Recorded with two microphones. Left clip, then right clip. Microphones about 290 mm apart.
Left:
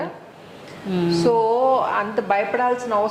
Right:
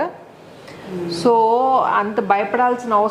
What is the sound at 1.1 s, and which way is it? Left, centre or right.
A woman's voice, right.